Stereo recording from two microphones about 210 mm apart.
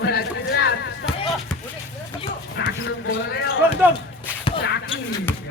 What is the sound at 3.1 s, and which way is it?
Speech, 55° left (ahead or behind).